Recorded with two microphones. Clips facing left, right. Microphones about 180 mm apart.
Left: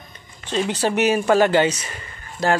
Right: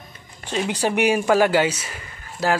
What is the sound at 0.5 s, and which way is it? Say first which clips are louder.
A man's voice: left 1 dB; 10° right (ahead or behind).